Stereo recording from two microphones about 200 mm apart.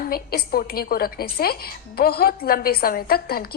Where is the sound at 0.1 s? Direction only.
50° left (ahead or behind).